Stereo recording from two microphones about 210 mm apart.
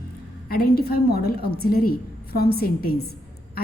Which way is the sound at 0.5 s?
45° left (ahead or behind).